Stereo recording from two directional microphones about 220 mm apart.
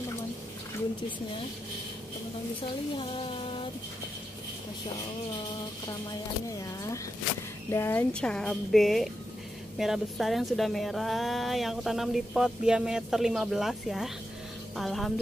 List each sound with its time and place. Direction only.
2.6 s speech: 25° left (ahead or behind)
7.7 s a woman's voice: 10° left (ahead or behind)